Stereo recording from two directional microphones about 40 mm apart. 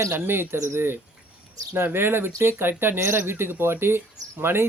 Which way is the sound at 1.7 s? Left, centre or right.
Right.